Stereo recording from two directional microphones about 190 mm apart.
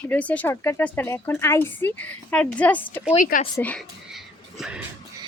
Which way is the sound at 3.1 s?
45° left (ahead or behind).